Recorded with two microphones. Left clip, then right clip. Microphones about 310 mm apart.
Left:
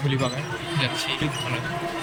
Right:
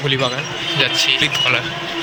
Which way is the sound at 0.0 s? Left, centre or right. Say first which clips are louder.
Right 8 dB; centre.